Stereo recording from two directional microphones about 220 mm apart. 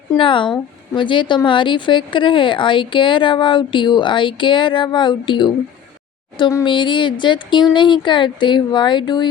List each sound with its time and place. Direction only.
0.2 s a woman's voice: 20° left (ahead or behind)